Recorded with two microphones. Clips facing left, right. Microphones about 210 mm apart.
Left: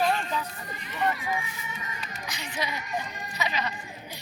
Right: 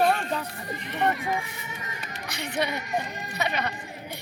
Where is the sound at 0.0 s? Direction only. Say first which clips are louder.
Right 3 dB; 60° right (ahead or behind).